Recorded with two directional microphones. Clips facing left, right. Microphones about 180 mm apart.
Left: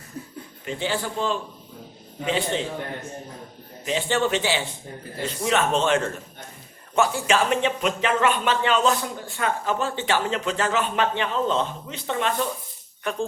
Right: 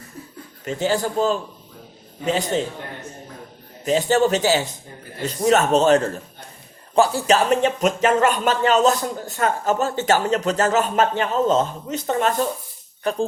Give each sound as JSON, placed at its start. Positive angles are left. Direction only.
{"t": 0.6, "sound": "speech", "side_deg": -40}
{"t": 3.8, "sound": "speech", "side_deg": -40}